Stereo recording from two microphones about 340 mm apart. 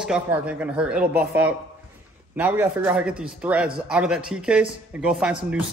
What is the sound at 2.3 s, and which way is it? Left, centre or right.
A man's voice, centre.